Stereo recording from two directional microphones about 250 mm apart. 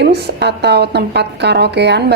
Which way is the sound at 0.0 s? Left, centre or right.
Right.